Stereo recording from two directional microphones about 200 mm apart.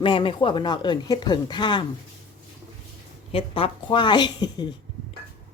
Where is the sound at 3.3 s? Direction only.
25° left (ahead or behind).